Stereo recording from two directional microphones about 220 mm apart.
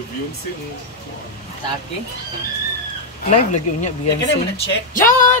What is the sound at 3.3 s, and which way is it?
Speech, 30° left (ahead or behind).